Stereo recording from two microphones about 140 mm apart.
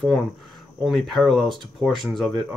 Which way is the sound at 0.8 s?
Centre (ahead or behind).